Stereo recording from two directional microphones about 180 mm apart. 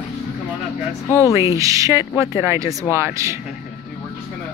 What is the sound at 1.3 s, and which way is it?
Speech, 15° right (ahead or behind).